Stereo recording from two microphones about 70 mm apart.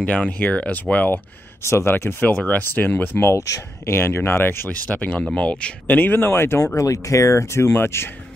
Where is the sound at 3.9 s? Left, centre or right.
Left.